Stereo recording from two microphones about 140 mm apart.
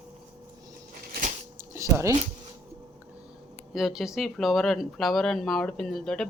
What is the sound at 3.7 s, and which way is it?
Speech, centre (ahead or behind).